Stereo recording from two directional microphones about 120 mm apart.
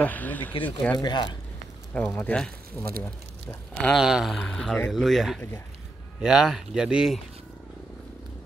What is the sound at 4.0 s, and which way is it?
Speech, 5° right (ahead or behind).